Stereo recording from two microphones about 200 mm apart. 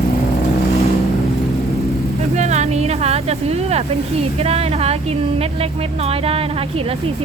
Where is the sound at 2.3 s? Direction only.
35° right (ahead or behind).